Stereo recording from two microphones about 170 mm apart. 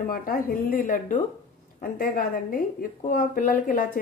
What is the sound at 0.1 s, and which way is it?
A woman's voice, 55° left (ahead or behind).